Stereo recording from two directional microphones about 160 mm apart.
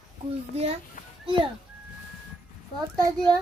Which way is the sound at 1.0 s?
55° left (ahead or behind).